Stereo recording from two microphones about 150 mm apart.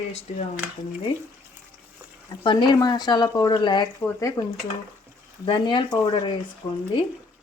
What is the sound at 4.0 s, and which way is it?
Speech, 15° left (ahead or behind).